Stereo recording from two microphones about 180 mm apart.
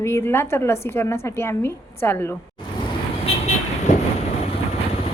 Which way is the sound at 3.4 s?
40° left (ahead or behind).